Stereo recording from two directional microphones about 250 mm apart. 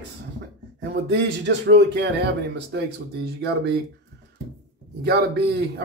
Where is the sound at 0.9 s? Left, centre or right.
Right.